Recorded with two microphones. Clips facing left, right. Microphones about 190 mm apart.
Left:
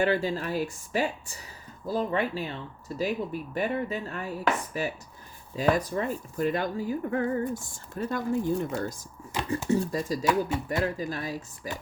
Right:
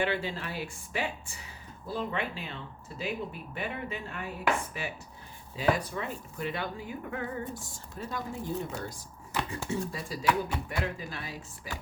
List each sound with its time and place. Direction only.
0.0 s speech: 40° left (ahead or behind)